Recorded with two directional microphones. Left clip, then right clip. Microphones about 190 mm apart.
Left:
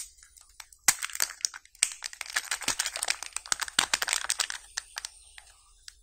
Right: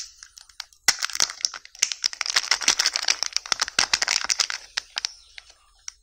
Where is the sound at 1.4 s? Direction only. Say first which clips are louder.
Right 6 dB; 25° right (ahead or behind).